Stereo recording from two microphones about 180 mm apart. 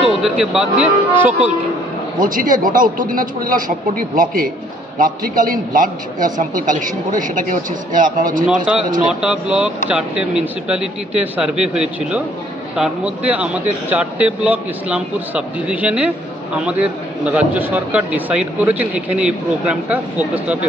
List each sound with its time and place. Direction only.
0.0 s speech: 5° right (ahead or behind)
2.1 s a man's voice: 50° right (ahead or behind)
9.2 s a man's voice: 5° right (ahead or behind)